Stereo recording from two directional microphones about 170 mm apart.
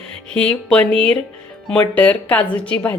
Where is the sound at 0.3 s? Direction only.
5° left (ahead or behind).